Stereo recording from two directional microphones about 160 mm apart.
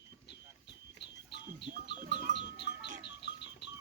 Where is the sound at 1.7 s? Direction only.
50° right (ahead or behind).